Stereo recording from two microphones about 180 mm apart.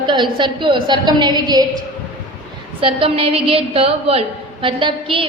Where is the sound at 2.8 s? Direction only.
30° right (ahead or behind).